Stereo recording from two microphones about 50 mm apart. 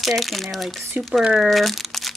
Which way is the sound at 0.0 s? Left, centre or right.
Centre.